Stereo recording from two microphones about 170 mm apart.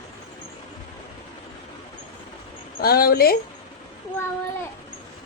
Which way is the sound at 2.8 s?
60° left (ahead or behind).